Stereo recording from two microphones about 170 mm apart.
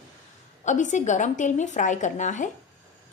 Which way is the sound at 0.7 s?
45° left (ahead or behind).